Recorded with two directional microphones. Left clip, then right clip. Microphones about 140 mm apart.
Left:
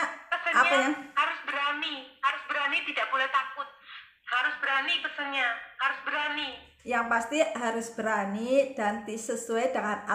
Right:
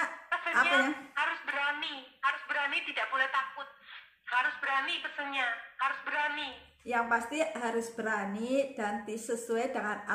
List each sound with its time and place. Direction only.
0.3 s a sound: 15° left (ahead or behind)
4.3 s a man's voice: 10° left (ahead or behind)
6.9 s a woman's voice: 25° left (ahead or behind)